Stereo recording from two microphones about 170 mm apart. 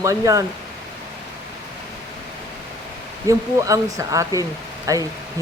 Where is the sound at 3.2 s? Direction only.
20° right (ahead or behind).